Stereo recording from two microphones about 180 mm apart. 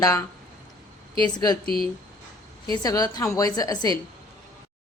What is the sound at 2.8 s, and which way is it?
A woman's voice, 20° left (ahead or behind).